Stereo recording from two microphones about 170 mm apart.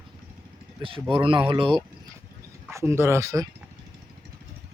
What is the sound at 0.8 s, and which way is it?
Speech, 30° right (ahead or behind).